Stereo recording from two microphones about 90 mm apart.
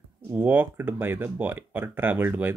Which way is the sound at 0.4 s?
20° right (ahead or behind).